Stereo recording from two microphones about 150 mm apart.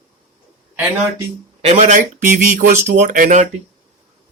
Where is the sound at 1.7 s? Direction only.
55° right (ahead or behind).